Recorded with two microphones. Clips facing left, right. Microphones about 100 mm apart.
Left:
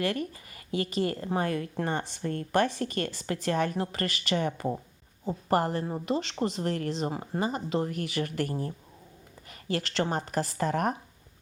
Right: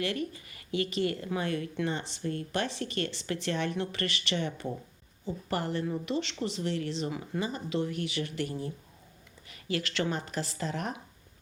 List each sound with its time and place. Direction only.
0.0 s speech: 45° left (ahead or behind)